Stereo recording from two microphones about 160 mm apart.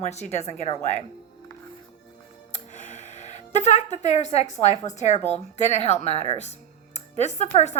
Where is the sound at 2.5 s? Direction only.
50° left (ahead or behind).